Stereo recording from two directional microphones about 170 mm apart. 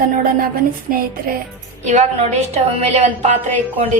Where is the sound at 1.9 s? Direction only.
40° right (ahead or behind).